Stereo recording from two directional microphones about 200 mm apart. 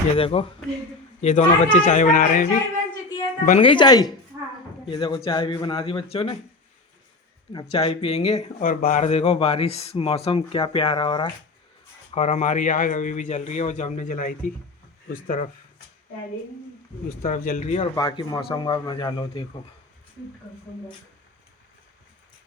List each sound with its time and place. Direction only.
0.2 s speech: 30° left (ahead or behind)
3.6 s speech: 25° left (ahead or behind)
7.5 s speech: 30° left (ahead or behind)
12.1 s speech: 35° left (ahead or behind)
17.2 s speech: 45° left (ahead or behind)
17.9 s speech: 20° left (ahead or behind)